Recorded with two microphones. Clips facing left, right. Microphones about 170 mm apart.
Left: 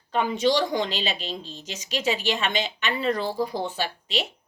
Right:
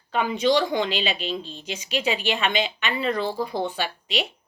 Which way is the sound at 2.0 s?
40° left (ahead or behind).